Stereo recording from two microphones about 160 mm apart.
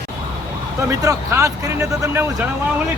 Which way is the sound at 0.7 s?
20° right (ahead or behind).